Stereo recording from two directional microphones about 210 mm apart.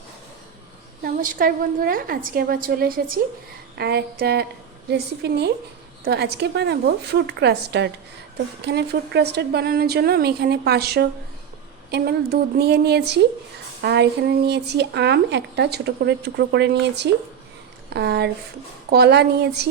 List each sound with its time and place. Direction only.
1.0 s speech: 40° right (ahead or behind)